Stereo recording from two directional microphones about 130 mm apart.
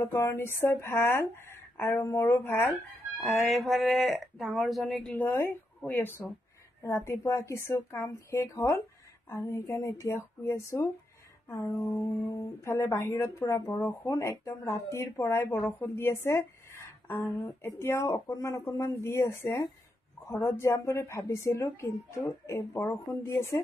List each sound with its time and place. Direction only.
0.0 s a woman's voice: 20° left (ahead or behind)
3.2 s speech: centre (ahead or behind)
5.2 s a woman's voice: 15° left (ahead or behind)